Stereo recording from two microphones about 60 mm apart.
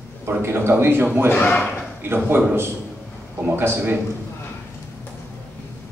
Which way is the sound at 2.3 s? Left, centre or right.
Right.